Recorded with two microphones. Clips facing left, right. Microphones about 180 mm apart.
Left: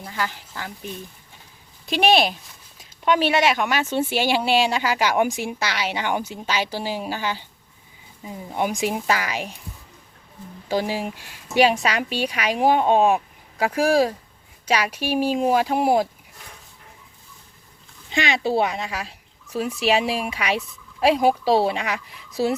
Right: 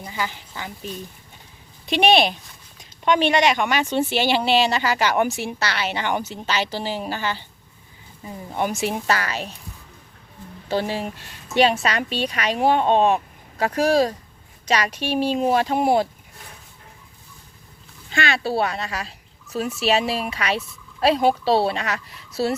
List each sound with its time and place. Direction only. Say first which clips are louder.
0.0 s speech: even; 5° right (ahead or behind)
1.9 s speech: right 1 dB; centre (ahead or behind)
10.7 s speech: even; 10° left (ahead or behind)
18.1 s speech: left 1 dB; 20° left (ahead or behind)